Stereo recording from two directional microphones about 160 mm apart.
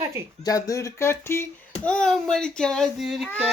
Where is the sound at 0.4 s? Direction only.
20° left (ahead or behind).